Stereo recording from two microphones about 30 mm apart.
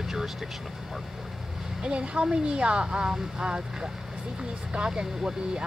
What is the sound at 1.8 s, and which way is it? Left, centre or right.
Speech, right.